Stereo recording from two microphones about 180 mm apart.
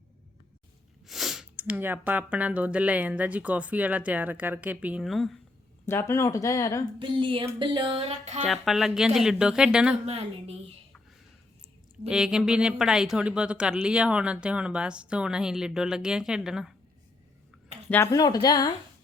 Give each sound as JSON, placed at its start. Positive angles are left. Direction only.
{"t": 1.0, "sound": "speech", "side_deg": 0}
{"t": 5.8, "sound": "speech", "side_deg": 15}
{"t": 7.0, "sound": "speech", "side_deg": -25}
{"t": 8.4, "sound": "speech", "side_deg": 0}
{"t": 10.1, "sound": "speech", "side_deg": -35}
{"t": 12.0, "sound": "speech", "side_deg": -5}
{"t": 17.8, "sound": "speech", "side_deg": 10}
{"t": 18.1, "sound": "a woman's voice", "side_deg": 20}